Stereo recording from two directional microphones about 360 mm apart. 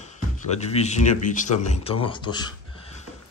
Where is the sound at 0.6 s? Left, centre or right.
Centre.